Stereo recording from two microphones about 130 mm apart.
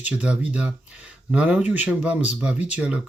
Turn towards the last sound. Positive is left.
turn(degrees=-10)  # may be behind; listen again after turning